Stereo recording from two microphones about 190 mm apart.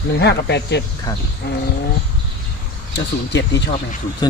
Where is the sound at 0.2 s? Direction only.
65° left (ahead or behind).